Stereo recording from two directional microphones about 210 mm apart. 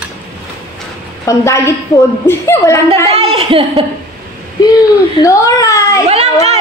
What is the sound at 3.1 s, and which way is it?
Speech, 25° right (ahead or behind).